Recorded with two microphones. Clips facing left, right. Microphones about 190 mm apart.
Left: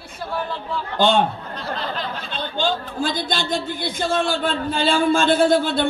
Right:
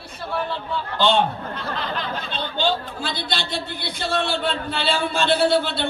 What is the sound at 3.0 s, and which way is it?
A man's voice, 45° left (ahead or behind).